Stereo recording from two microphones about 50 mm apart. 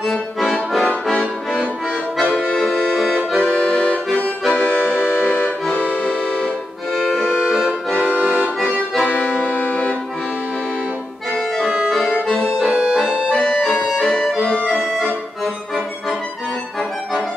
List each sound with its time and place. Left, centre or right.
0.0 s accordion: centre
1.1 s accordion: left
2.5 s accordion: centre; by 6.5 s left
7.4 s accordion: centre
8.1 s accordion: right
9.1 s music: left
11.6 s accordion: centre
12.0 s accordion: centre
13.3 s music: centre